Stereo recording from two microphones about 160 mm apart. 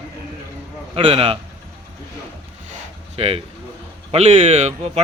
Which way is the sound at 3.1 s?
40° right (ahead or behind).